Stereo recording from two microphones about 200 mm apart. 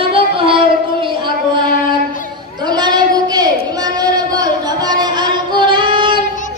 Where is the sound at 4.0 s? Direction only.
20° right (ahead or behind).